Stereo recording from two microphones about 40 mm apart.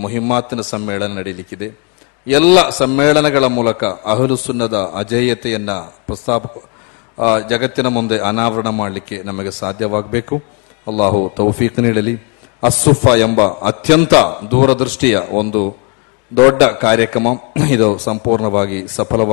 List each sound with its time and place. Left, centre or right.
0.0 s a man's voice: centre